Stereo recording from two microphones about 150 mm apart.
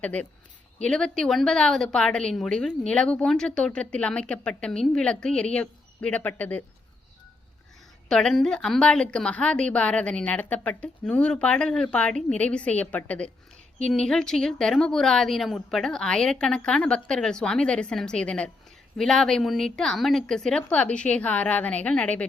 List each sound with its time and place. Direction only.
0.0 s a woman's voice: 10° left (ahead or behind)
8.1 s a woman's voice: 5° left (ahead or behind)